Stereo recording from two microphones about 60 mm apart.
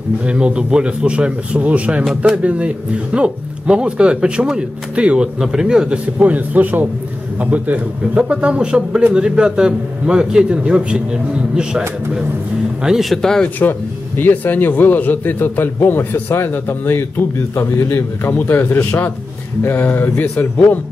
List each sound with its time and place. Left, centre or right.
0.2 s speech: centre
6.1 s speech: right
12.8 s speech: centre
13.2 s speech: centre
13.6 s a man's voice: left
18.5 s speech: left